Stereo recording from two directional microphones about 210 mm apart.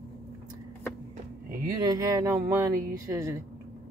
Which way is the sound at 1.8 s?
15° right (ahead or behind).